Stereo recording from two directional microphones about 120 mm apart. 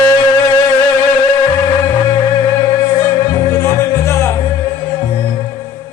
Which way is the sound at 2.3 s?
35° left (ahead or behind).